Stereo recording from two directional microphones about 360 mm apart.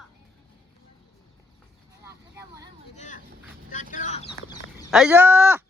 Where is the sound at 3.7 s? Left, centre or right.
Left.